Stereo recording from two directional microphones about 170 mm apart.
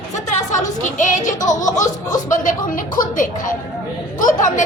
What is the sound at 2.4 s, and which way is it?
Speech, 50° left (ahead or behind).